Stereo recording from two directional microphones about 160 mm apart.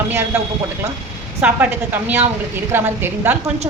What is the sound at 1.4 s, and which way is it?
A woman's voice, 10° right (ahead or behind).